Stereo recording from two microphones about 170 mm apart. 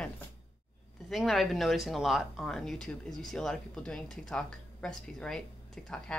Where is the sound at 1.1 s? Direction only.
Centre (ahead or behind).